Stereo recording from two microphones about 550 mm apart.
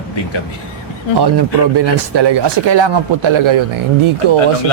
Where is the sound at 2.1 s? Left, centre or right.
Right.